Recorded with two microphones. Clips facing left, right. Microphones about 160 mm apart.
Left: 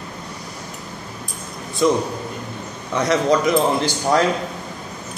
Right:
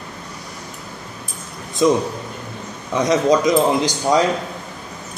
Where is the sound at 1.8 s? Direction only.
20° right (ahead or behind).